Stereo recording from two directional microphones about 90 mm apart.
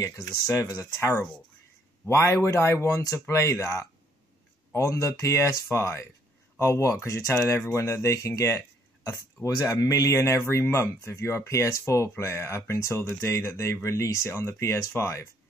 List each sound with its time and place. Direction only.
0.2 s speech: 40° left (ahead or behind)